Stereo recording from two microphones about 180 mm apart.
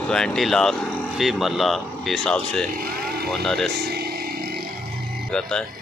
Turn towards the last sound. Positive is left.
turn(degrees=5)  # may be behind; listen again after turning